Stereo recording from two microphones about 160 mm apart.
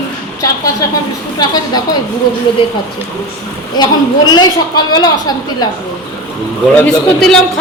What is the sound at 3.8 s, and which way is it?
A woman's voice, 25° left (ahead or behind).